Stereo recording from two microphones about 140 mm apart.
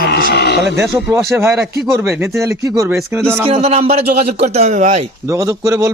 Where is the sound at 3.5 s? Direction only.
45° right (ahead or behind).